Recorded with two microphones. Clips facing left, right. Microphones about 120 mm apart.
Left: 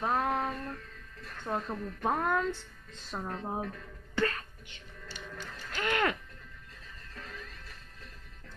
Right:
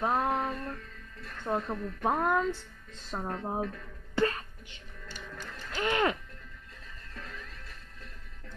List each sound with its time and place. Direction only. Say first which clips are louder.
0.0 s music: right 1 dB; 20° right (ahead or behind)
1.4 s a woman's voice: right 3 dB; 15° right (ahead or behind)
4.2 s music: right 3 dB; 25° right (ahead or behind)
5.7 s music: right 2 dB; 20° right (ahead or behind)